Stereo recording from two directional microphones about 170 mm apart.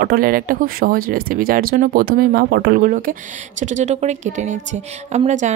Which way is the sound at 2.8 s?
55° right (ahead or behind).